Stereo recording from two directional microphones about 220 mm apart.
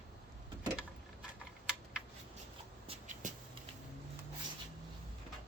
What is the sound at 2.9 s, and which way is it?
Shuffle, 35° right (ahead or behind).